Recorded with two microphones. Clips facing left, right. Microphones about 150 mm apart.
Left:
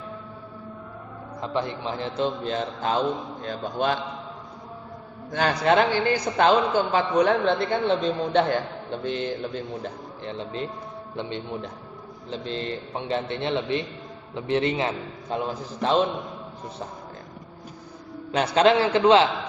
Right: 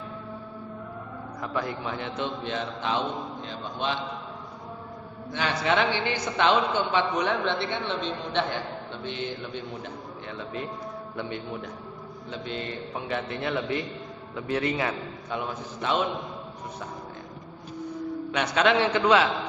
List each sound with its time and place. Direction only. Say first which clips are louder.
1.4 s a man's voice: left 3 dB; 25° left (ahead or behind); by 3.9 s 50° left (ahead or behind)
5.3 s a man's voice: left 5 dB; 45° left (ahead or behind)
9.8 s a man's voice: left 4 dB; 30° left (ahead or behind)
18.5 s a man's voice: left 4 dB; 35° left (ahead or behind)